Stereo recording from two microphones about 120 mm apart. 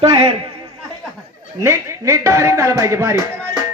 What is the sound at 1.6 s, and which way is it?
Speech, 25° right (ahead or behind).